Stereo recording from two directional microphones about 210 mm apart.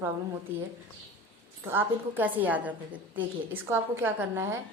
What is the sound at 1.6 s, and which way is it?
Speech, 10° right (ahead or behind).